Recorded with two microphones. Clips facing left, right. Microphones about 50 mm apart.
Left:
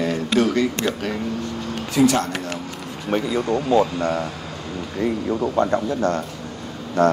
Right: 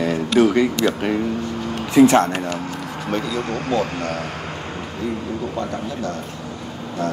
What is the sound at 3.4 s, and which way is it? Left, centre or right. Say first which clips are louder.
Speech: left 4 dB; right.